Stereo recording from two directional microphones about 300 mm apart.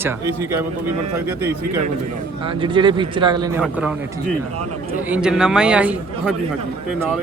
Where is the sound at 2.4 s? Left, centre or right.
Centre.